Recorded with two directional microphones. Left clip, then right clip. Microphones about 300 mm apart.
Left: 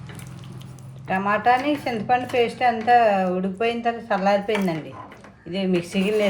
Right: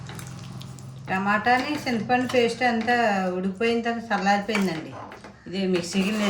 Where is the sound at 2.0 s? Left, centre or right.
Centre.